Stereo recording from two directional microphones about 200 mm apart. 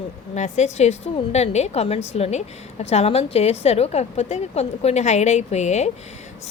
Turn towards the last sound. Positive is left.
turn(degrees=35)  # may be behind; listen again after turning